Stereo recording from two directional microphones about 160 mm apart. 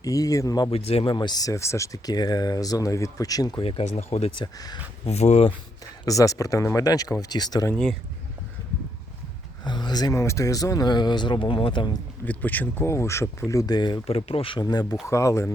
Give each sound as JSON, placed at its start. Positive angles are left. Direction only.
{"t": 0.0, "sound": "speech", "side_deg": 20}
{"t": 0.7, "sound": "speech", "side_deg": 40}
{"t": 3.6, "sound": "speech", "side_deg": 35}
{"t": 4.5, "sound": "speech", "side_deg": 25}
{"t": 5.0, "sound": "speech", "side_deg": 45}
{"t": 6.1, "sound": "speech", "side_deg": 20}
{"t": 7.7, "sound": "speech", "side_deg": 5}
{"t": 9.6, "sound": "speech", "side_deg": 25}
{"t": 12.2, "sound": "speech", "side_deg": 10}